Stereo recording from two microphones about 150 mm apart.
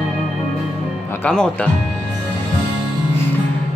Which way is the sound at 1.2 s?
5° left (ahead or behind).